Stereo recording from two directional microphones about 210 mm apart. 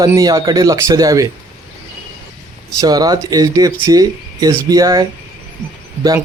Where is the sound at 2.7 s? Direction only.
15° right (ahead or behind).